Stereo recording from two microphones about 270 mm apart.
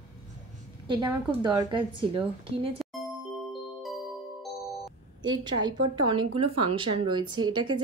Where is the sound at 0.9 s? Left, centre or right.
Centre.